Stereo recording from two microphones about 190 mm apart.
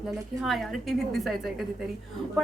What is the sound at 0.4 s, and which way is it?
A woman's voice, centre (ahead or behind).